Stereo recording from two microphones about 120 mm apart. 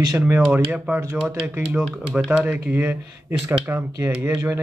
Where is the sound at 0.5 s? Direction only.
10° right (ahead or behind).